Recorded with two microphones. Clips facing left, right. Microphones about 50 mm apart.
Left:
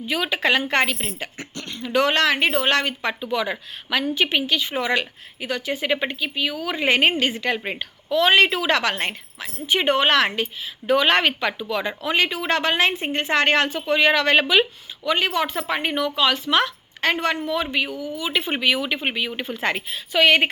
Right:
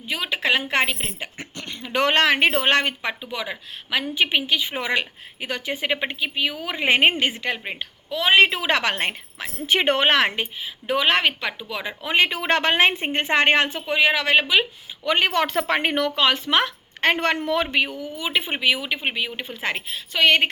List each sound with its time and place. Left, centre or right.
0.1 s a woman's voice: centre; by 2.9 s right
3.0 s speech: centre
3.2 s speech: centre
4.1 s a woman's voice: centre
7.3 s speech: centre
8.5 s a woman's voice: right
9.6 s a woman's voice: right; by 11.9 s centre
12.0 s a woman's voice: right
14.0 s speech: centre
15.0 s speech: right
16.2 s a woman's voice: right
18.3 s speech: centre